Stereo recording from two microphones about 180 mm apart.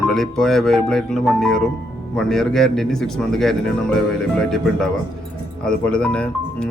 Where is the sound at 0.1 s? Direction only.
Centre (ahead or behind).